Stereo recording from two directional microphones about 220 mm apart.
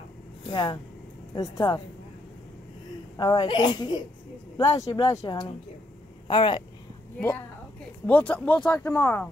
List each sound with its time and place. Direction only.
0.5 s speech: 20° left (ahead or behind)
3.2 s a woman's voice: 20° left (ahead or behind)
7.2 s speech: 10° left (ahead or behind)